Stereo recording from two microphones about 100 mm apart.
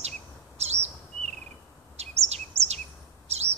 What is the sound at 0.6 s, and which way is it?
Bird, 90° right.